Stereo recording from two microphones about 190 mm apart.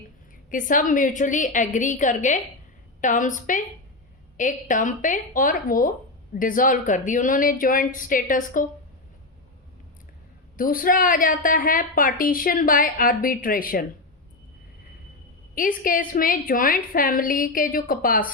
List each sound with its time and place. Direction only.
0.5 s a woman's voice: 45° left (ahead or behind)
10.6 s a woman's voice: 50° left (ahead or behind)
15.5 s a woman's voice: 45° left (ahead or behind)